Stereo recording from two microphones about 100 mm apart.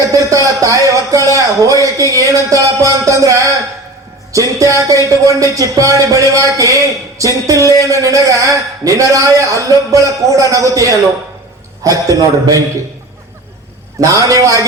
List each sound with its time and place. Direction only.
0.1 s speech: 35° right (ahead or behind)
14.1 s speech: 35° right (ahead or behind)